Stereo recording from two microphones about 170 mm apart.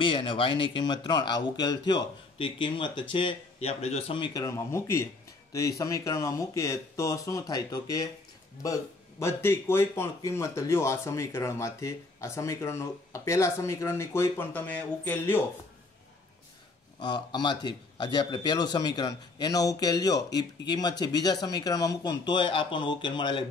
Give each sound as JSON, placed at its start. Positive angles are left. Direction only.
{"t": 0.0, "sound": "speech", "side_deg": 30}
{"t": 9.2, "sound": "speech", "side_deg": 15}
{"t": 17.0, "sound": "speech", "side_deg": 25}